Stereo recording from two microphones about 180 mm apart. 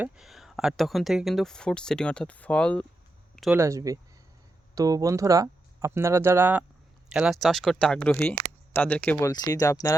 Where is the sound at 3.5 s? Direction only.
15° right (ahead or behind).